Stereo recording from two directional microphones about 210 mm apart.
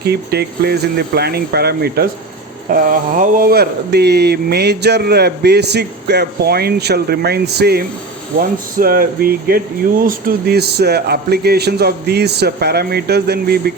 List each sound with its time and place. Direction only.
0.0 s speech: 50° right (ahead or behind)